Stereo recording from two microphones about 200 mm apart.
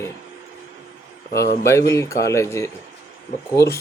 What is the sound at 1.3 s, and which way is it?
Speech, 55° left (ahead or behind).